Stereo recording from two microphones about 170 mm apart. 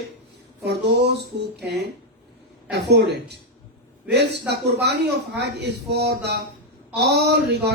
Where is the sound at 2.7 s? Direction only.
75° right (ahead or behind).